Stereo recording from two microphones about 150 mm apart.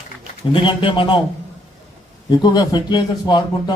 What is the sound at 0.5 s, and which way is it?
Speech, 35° left (ahead or behind).